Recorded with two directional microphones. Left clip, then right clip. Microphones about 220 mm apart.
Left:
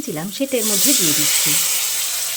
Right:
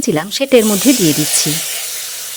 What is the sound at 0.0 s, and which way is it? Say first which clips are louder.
Speech: right 8 dB; 45° right (ahead or behind).